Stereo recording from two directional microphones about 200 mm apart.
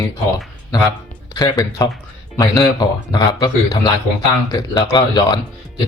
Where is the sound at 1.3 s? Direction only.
20° left (ahead or behind).